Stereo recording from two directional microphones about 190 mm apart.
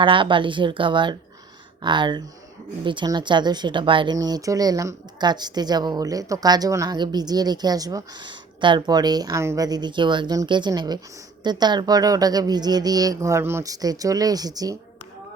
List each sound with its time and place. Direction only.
0.0 s speech: 25° right (ahead or behind)